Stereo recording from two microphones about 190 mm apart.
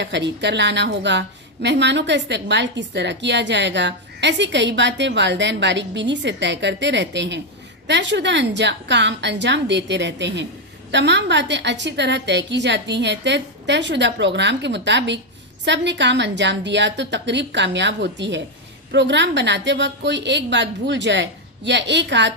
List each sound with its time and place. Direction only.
0.0 s a woman's voice: 65° right (ahead or behind)